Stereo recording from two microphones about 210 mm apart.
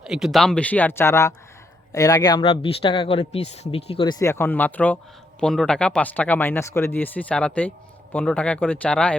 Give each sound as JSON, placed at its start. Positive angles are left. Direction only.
{"t": 0.0, "sound": "speech", "side_deg": 0}
{"t": 4.0, "sound": "speech", "side_deg": 15}